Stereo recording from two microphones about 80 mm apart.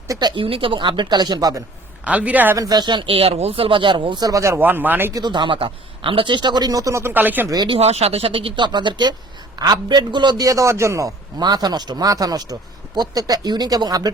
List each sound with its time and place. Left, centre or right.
0.2 s speech: right
2.0 s speech: centre
2.6 s speech: right
4.3 s speech: right
4.6 s speech: right
5.2 s speech: right
7.0 s speech: right
7.5 s a man's voice: right
8.3 s a man's voice: right
10.4 s speech: right
11.3 s a man's voice: right